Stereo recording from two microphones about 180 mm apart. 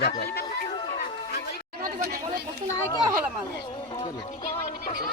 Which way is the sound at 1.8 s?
55° right (ahead or behind).